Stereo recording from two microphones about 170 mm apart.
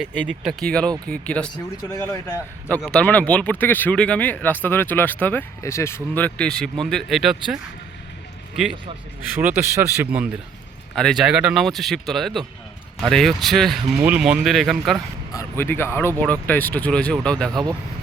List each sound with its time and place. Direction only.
0.1 s speech: 5° left (ahead or behind)
2.6 s speech: 10° left (ahead or behind)
9.4 s speech: 10° right (ahead or behind)
10.9 s speech: centre (ahead or behind)
15.3 s speech: 15° left (ahead or behind)
17.5 s speech: 25° right (ahead or behind)